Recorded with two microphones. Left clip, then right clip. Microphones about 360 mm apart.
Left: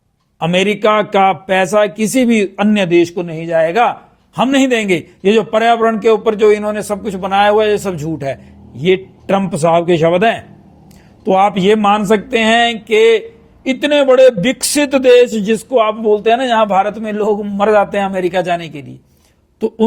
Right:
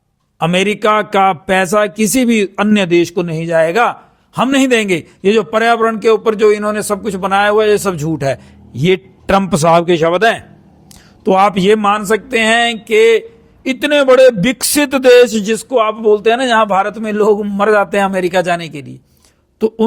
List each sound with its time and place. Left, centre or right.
0.3 s a man's voice: centre
13.7 s speech: centre; by 19.8 s right